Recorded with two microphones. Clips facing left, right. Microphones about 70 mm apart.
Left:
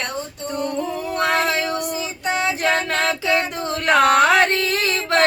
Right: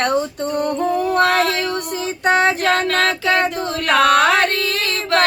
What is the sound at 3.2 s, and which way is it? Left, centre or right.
Female singing, right.